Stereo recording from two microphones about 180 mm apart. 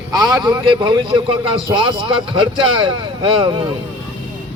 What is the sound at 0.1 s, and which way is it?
Speech, 20° right (ahead or behind).